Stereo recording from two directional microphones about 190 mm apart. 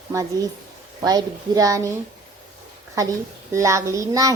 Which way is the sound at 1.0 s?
20° right (ahead or behind).